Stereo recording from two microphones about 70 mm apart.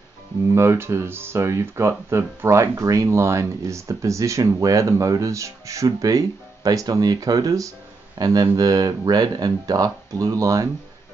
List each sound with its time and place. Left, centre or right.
0.6 s speech: right
8.2 s speech: right